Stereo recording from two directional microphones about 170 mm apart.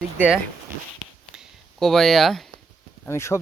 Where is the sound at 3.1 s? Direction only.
15° left (ahead or behind).